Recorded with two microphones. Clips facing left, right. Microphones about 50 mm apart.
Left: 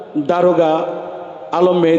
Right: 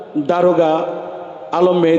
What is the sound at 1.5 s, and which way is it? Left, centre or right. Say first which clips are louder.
Speech: even; left.